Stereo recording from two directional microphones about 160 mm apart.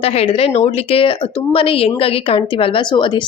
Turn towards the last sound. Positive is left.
turn(degrees=30)  # may be behind; listen again after turning